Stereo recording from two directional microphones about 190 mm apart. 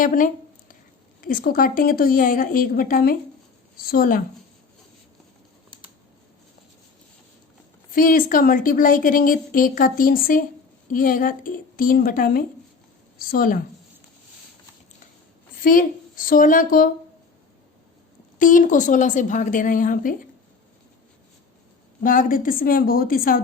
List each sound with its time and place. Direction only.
0.0 s a woman's voice: 45° left (ahead or behind)
7.9 s a woman's voice: 45° left (ahead or behind)
15.6 s a woman's voice: 45° left (ahead or behind)
18.3 s a woman's voice: 45° left (ahead or behind)
22.0 s a woman's voice: 45° left (ahead or behind)